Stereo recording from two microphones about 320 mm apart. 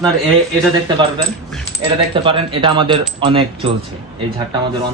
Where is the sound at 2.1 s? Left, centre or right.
Centre.